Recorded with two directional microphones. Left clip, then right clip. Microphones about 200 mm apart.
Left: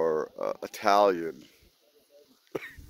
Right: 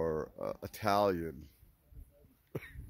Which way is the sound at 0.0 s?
5° right (ahead or behind).